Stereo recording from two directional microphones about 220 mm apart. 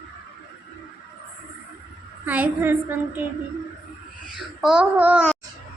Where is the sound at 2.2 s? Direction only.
10° right (ahead or behind).